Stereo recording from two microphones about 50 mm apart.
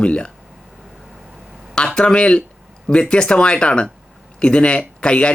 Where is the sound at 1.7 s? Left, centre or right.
Centre.